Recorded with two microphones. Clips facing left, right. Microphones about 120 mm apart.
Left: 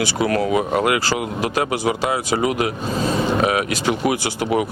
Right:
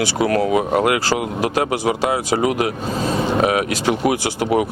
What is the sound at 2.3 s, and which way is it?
Speech, 50° right (ahead or behind).